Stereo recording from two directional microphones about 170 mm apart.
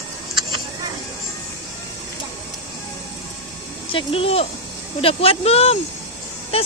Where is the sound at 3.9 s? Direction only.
35° left (ahead or behind).